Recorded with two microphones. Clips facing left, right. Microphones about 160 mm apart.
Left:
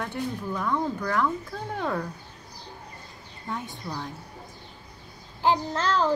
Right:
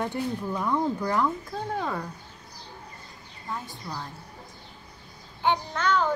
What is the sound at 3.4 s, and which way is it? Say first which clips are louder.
Speech: left 2 dB; centre (ahead or behind).